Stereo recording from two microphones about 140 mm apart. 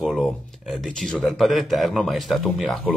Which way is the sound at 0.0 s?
Centre (ahead or behind).